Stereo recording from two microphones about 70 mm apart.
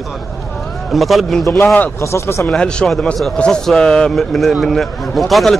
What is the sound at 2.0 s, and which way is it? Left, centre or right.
Speech, left.